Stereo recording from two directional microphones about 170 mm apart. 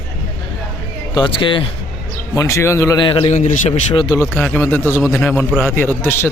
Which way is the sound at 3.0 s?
30° left (ahead or behind).